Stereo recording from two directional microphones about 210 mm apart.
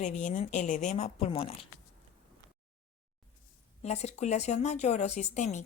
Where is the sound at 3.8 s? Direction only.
30° left (ahead or behind).